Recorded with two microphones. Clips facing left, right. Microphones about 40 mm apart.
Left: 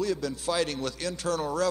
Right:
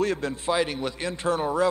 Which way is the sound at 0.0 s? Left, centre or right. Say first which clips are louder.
Right 3 dB; right.